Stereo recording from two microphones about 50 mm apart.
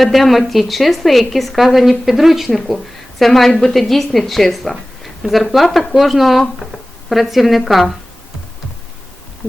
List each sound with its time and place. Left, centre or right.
0.0 s a woman's voice: centre
3.5 s a woman's voice: centre
3.8 s a woman's voice: centre